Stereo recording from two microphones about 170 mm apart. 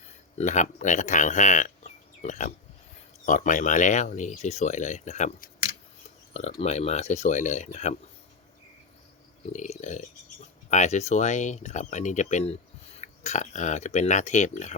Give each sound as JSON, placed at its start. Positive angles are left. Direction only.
{"t": 0.3, "sound": "speech", "side_deg": 45}
{"t": 6.6, "sound": "speech", "side_deg": 40}
{"t": 9.5, "sound": "speech", "side_deg": 45}